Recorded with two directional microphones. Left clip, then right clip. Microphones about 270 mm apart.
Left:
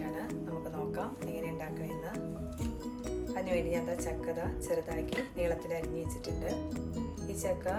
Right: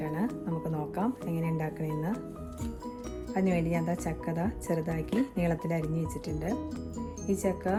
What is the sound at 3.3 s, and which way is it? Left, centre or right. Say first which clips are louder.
Speech: right 3 dB; right.